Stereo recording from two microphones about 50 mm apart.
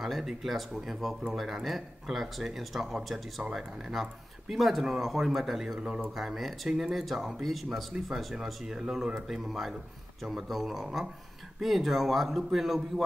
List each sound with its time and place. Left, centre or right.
0.0 s speech: centre
5.8 s speech: right
6.1 s speech: centre